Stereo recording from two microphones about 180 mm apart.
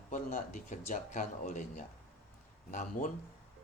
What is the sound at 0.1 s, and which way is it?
Speech, 45° left (ahead or behind).